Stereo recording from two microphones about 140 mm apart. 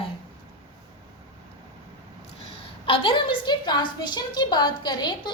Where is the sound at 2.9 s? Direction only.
40° left (ahead or behind).